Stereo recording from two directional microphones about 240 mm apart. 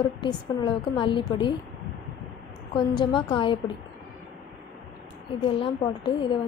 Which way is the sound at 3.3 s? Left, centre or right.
Left.